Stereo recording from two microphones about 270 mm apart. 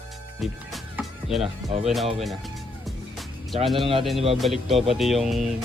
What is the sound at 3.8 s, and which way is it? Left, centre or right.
Speech, centre.